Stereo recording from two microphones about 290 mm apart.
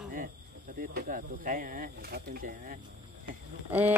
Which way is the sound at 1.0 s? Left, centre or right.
Right.